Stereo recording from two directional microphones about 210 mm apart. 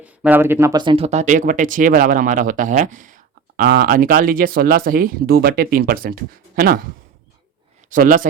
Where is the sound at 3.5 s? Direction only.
50° right (ahead or behind).